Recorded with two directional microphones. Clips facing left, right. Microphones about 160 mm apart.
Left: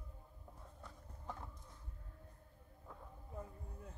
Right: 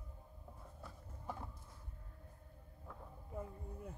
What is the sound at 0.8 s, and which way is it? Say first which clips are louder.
Horse: right 2 dB; 10° right (ahead or behind).